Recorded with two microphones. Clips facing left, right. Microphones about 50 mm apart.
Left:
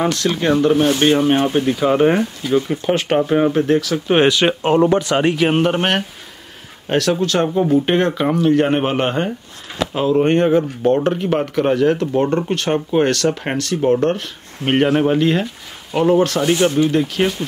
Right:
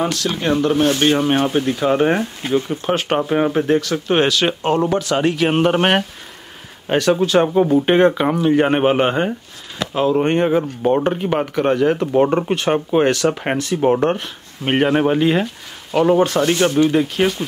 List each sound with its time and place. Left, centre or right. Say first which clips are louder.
0.0 s speech: left 2 dB; centre
4.1 s speech: left 3 dB; centre
5.3 s speech: even; centre